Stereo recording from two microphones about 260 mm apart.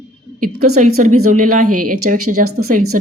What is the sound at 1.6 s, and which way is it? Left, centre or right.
Speech, right.